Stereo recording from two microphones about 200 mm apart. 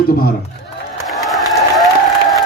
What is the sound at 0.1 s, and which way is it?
Speech, 50° left (ahead or behind).